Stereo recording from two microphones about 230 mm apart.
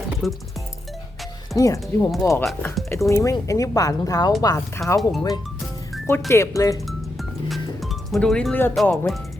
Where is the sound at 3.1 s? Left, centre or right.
Centre.